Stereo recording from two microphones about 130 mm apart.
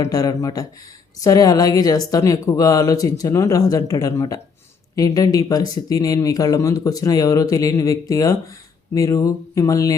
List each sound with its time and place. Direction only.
0.0 s speech: 25° left (ahead or behind)